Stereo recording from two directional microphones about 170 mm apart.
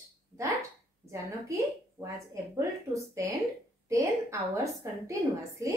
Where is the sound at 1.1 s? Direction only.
20° right (ahead or behind).